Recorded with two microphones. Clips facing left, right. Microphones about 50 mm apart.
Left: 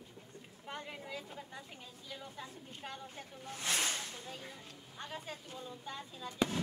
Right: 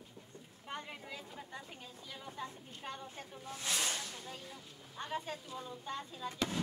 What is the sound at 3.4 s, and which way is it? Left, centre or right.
Snake, left.